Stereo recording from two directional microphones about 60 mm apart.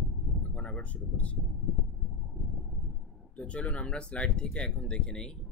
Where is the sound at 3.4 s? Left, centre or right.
Left.